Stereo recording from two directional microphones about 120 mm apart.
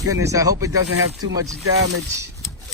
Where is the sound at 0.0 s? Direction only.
25° right (ahead or behind).